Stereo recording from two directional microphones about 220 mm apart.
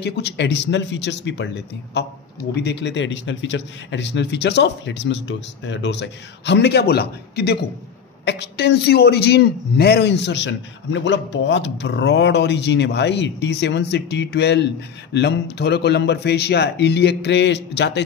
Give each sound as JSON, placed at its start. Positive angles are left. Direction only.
{"t": 0.0, "sound": "a man's voice", "side_deg": 50}
{"t": 2.5, "sound": "a man's voice", "side_deg": 50}